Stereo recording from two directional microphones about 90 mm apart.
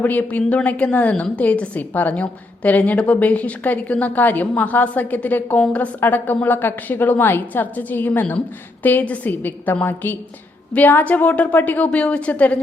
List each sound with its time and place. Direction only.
0.0 s a woman's voice: 20° left (ahead or behind)